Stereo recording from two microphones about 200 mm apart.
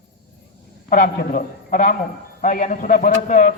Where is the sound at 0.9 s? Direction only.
45° left (ahead or behind).